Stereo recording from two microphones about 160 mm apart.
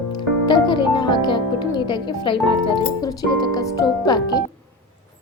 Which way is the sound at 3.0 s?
25° left (ahead or behind).